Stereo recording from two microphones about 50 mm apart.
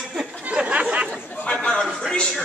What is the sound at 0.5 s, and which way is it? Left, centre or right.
Chatter, centre.